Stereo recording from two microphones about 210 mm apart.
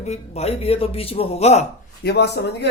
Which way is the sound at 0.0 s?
30° left (ahead or behind).